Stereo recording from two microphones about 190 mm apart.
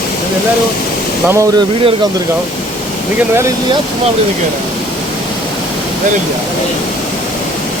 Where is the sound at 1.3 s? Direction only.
15° right (ahead or behind).